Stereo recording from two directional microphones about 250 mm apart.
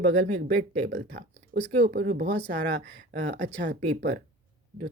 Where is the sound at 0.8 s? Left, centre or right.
Right.